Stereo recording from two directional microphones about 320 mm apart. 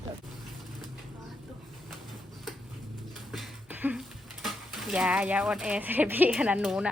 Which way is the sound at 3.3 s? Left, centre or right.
Centre.